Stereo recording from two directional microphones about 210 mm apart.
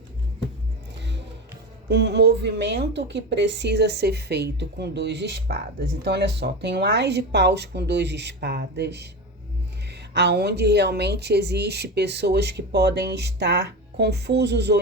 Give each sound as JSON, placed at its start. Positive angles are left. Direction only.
{"t": 1.9, "sound": "a woman's voice", "side_deg": -55}
{"t": 10.2, "sound": "a woman's voice", "side_deg": -55}